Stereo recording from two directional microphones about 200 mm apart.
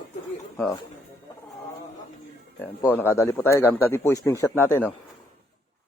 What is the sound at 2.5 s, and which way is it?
Speech, 10° left (ahead or behind).